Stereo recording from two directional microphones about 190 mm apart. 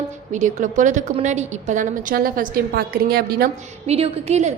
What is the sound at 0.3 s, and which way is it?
A woman's voice, 40° right (ahead or behind).